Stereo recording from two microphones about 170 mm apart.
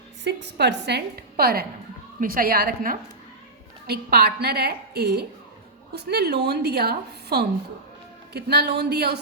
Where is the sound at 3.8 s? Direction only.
70° right (ahead or behind).